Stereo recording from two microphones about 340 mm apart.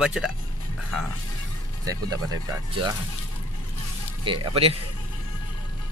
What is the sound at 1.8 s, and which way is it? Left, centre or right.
Speech, centre.